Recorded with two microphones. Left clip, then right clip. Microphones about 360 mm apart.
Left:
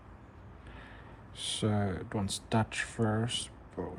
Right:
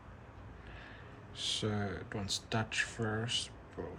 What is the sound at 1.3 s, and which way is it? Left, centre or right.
Speech, centre.